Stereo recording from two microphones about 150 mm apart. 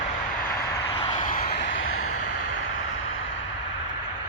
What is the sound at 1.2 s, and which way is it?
Vehicle, 70° left (ahead or behind).